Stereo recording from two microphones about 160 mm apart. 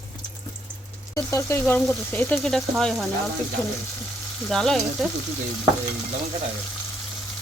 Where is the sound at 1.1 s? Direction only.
15° left (ahead or behind); by 3.1 s centre (ahead or behind).